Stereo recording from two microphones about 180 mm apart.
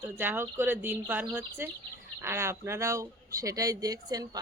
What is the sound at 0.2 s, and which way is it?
Speech, 10° right (ahead or behind).